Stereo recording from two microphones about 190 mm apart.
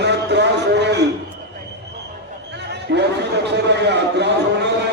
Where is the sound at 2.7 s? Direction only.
60° right (ahead or behind).